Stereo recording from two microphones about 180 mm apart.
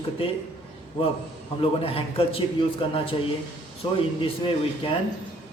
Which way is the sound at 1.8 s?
30° left (ahead or behind).